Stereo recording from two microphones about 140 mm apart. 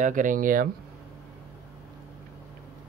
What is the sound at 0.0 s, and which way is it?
Speech, 70° right (ahead or behind).